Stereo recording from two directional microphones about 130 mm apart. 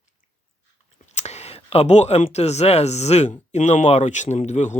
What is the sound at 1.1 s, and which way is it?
Speech, 55° left (ahead or behind).